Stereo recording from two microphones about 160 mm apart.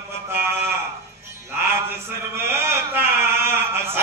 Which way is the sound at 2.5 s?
15° right (ahead or behind).